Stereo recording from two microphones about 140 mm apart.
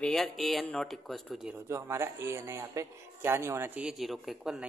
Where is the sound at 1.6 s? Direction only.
20° right (ahead or behind).